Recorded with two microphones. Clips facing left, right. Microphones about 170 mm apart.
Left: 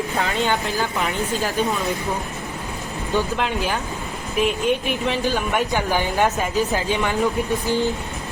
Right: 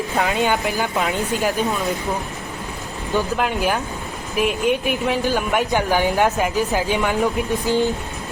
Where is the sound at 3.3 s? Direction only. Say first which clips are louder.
Right 3 dB; 10° right (ahead or behind).